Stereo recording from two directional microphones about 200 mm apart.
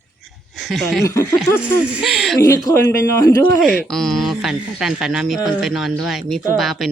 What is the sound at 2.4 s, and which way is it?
Speech, 15° left (ahead or behind).